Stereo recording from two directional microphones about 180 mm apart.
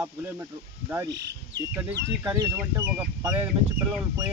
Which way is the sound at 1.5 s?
10° right (ahead or behind).